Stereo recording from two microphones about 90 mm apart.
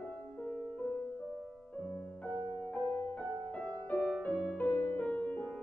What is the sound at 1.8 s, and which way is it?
Music, 10° left (ahead or behind).